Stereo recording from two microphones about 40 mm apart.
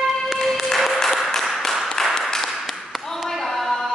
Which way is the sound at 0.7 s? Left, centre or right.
Centre.